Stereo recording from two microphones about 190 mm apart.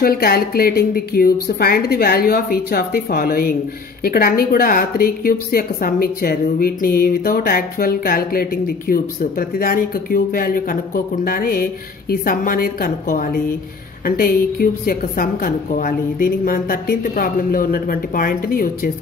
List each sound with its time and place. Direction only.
0.0 s a woman's voice: 50° left (ahead or behind)